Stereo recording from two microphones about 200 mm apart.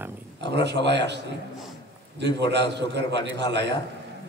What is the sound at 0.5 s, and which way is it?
Speech, 60° right (ahead or behind).